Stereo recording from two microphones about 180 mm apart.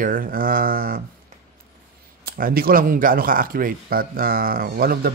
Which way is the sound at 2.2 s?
55° right (ahead or behind).